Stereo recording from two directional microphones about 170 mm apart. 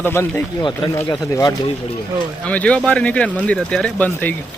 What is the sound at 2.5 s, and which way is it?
Speech, 10° left (ahead or behind).